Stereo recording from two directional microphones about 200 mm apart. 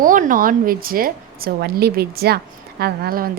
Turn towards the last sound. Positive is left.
turn(degrees=-50)  # may be behind; listen again after turning